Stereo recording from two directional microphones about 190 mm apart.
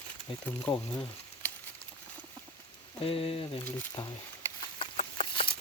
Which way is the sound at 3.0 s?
30° left (ahead or behind).